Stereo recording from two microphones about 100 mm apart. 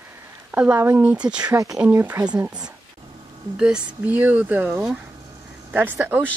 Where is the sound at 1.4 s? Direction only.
35° right (ahead or behind).